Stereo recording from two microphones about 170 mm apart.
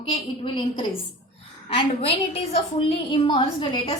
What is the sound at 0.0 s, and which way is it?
A woman's voice, 30° left (ahead or behind).